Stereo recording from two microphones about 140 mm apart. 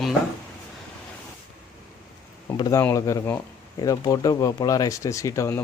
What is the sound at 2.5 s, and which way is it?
Speech, 25° left (ahead or behind).